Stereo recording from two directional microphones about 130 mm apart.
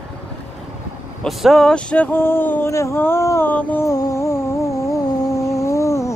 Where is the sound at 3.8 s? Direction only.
25° left (ahead or behind).